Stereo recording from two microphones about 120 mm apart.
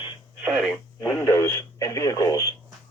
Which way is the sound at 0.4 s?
5° right (ahead or behind).